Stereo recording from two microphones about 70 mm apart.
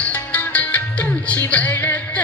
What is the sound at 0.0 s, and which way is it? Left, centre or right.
Music, left.